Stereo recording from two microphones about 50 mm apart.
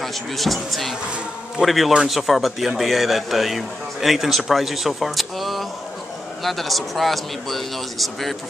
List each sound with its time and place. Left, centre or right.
0.0 s a man's voice: centre